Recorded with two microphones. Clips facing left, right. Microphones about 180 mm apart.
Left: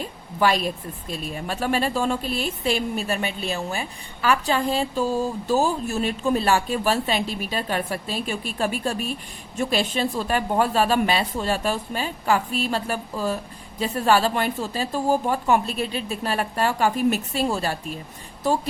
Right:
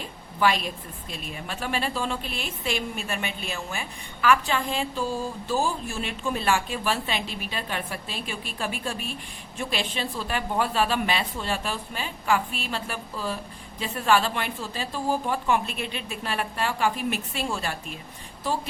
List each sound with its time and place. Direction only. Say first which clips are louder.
0.3 s a woman's voice: left 3 dB; 40° left (ahead or behind)